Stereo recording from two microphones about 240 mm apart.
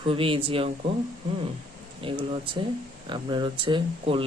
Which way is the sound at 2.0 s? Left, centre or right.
Right.